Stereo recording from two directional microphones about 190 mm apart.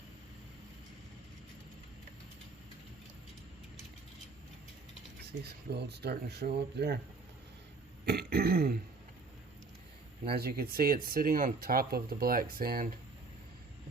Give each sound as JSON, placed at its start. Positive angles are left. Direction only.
{"t": 5.4, "sound": "speech", "side_deg": -60}
{"t": 8.0, "sound": "throat clearing", "side_deg": -55}
{"t": 10.2, "sound": "speech", "side_deg": -55}